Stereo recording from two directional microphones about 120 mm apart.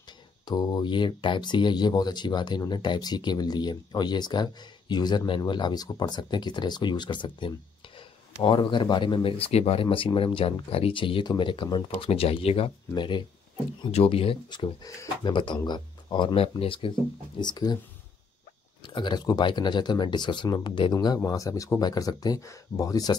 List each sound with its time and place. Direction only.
0.5 s speech: 35° left (ahead or behind); by 12.7 s 50° left (ahead or behind)
12.9 s speech: 40° left (ahead or behind)
13.9 s speech: 50° left (ahead or behind)
14.8 s speech: 35° left (ahead or behind)
17.4 s speech: 35° left (ahead or behind)
18.8 s speech: 40° left (ahead or behind)